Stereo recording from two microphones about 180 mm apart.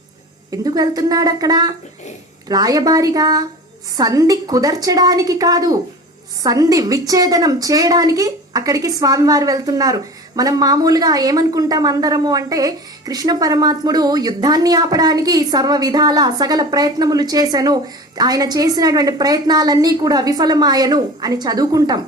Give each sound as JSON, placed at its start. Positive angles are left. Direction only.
{"t": 0.5, "sound": "a woman's voice", "side_deg": -20}